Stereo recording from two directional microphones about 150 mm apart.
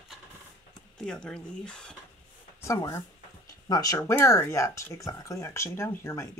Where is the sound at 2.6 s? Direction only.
20° left (ahead or behind).